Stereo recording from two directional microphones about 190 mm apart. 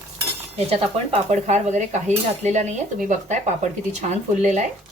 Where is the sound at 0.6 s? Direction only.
35° right (ahead or behind).